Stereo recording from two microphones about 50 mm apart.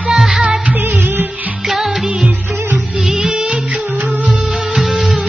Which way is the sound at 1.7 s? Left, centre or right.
Centre.